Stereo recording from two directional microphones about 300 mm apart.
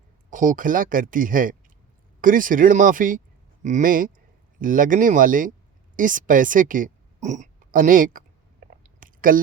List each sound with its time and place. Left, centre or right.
0.3 s a woman's voice: right
8.8 s chewing: right